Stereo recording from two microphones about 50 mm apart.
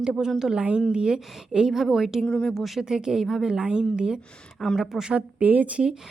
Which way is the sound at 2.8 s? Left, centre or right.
Centre.